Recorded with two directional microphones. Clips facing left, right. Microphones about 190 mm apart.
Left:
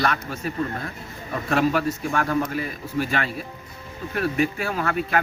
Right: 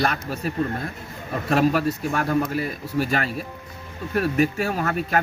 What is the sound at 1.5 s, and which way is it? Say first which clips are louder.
A man's voice: right 2 dB; 40° right (ahead or behind).